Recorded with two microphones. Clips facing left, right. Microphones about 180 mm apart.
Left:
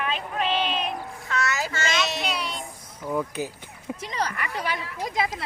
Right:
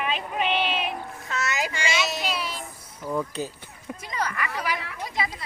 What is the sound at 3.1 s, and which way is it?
Speech, 5° left (ahead or behind).